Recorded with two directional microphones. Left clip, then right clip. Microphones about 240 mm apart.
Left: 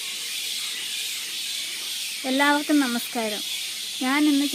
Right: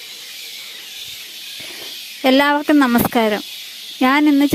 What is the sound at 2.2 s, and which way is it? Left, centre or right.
Speech, right.